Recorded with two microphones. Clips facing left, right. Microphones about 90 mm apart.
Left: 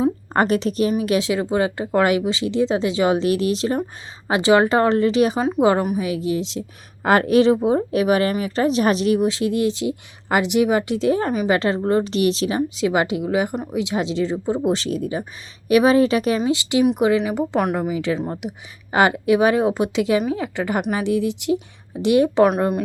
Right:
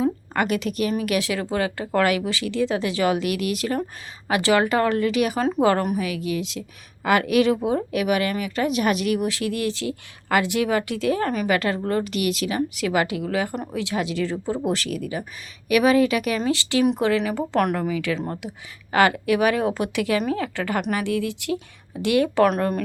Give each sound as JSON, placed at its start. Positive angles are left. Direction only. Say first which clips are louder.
{"t": 0.3, "sound": "a woman's voice", "louder": "left 6 dB", "side_deg": 35}
{"t": 16.4, "sound": "speech", "louder": "left 3 dB", "side_deg": 20}